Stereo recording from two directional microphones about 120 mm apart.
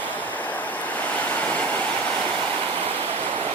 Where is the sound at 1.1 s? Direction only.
10° left (ahead or behind).